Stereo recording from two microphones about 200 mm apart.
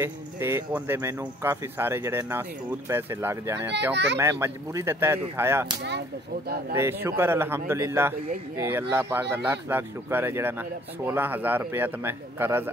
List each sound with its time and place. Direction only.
0.0 s speech: 10° right (ahead or behind)
3.9 s whip: 60° right (ahead or behind)
4.2 s speech: 15° right (ahead or behind)
5.8 s whip: 60° right (ahead or behind)
6.7 s speech: 10° right (ahead or behind)